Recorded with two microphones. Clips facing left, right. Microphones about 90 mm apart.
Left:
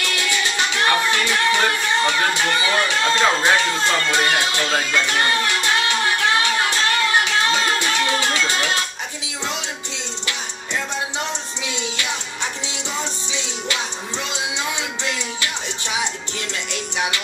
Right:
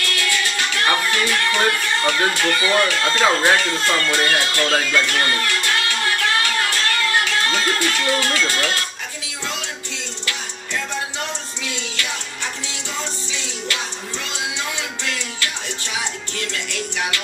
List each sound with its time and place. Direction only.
0.0 s music: 20° left (ahead or behind)
11.1 s music: 20° left (ahead or behind)
13.3 s music: 20° left (ahead or behind)